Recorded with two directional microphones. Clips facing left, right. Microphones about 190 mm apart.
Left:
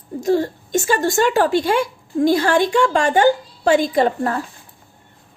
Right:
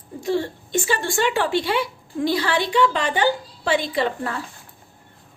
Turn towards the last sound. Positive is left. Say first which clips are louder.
# left 6 dB
turn(degrees=45)  # may be behind; listen again after turning